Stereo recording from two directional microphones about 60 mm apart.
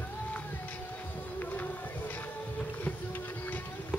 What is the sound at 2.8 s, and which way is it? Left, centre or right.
Music, left.